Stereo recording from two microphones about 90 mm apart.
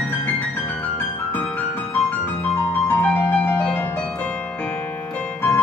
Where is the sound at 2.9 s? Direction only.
15° left (ahead or behind).